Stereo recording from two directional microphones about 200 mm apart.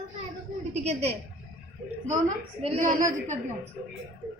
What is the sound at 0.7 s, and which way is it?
A woman's voice, 35° right (ahead or behind).